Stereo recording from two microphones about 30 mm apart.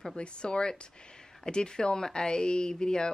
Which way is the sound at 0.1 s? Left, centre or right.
Left.